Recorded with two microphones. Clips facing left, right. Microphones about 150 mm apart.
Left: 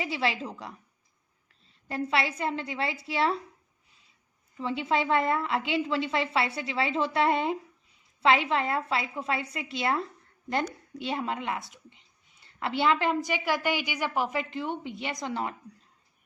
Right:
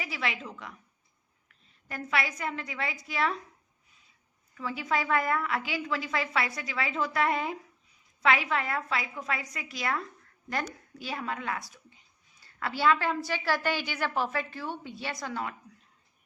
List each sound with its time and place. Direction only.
0.0 s a woman's voice: 30° left (ahead or behind)
4.5 s a woman's voice: 25° left (ahead or behind)